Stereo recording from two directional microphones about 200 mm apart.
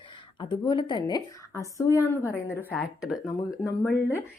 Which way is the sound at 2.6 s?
Centre (ahead or behind).